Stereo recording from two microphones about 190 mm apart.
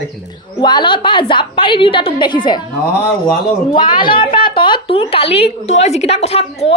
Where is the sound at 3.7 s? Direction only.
25° left (ahead or behind).